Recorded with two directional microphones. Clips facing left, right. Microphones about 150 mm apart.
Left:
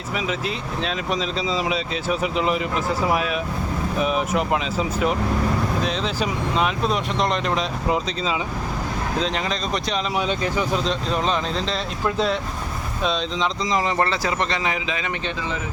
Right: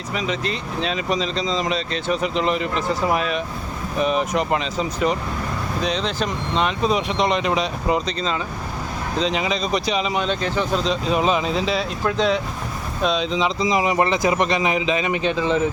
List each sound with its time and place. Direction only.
0.2 s speech: 5° left (ahead or behind)
11.1 s a man's voice: 5° right (ahead or behind)